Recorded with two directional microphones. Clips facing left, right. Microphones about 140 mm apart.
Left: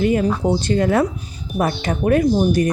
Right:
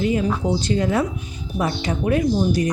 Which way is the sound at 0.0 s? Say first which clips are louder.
Left 3 dB; 55° left (ahead or behind).